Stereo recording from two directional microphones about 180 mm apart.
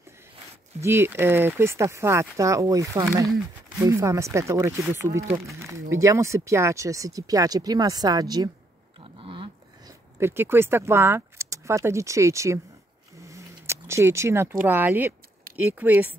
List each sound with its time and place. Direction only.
0.7 s speech: 15° right (ahead or behind)
9.0 s dog: 30° right (ahead or behind)
10.1 s speech: 15° right (ahead or behind)